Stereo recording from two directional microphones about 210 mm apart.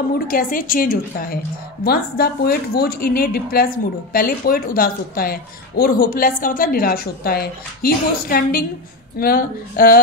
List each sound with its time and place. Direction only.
0.3 s a woman's voice: 40° left (ahead or behind)